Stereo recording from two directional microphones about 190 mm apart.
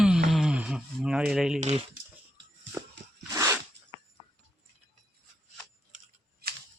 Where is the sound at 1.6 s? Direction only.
30° right (ahead or behind).